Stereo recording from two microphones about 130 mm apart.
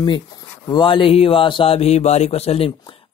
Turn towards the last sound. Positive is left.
turn(degrees=35)  # may be behind; listen again after turning